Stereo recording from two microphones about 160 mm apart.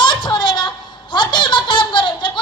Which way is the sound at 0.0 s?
30° left (ahead or behind).